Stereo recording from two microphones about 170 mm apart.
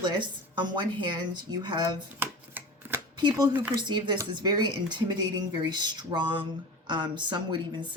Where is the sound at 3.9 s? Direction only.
25° right (ahead or behind).